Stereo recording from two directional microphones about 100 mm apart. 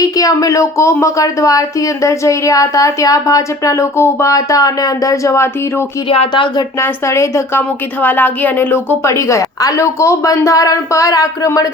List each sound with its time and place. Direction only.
0.0 s speech: 35° left (ahead or behind)
6.1 s speech: 60° left (ahead or behind)
6.7 s a woman's voice: 25° left (ahead or behind)